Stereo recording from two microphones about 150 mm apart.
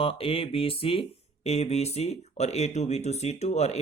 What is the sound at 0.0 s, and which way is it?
Speech, 40° left (ahead or behind).